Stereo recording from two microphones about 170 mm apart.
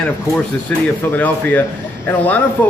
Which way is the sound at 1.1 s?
10° left (ahead or behind).